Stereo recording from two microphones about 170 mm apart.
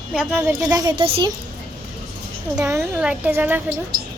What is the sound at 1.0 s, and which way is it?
Speech, 30° right (ahead or behind).